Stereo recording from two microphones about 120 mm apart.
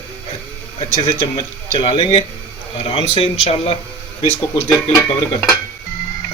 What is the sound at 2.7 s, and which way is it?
Speech, 55° left (ahead or behind).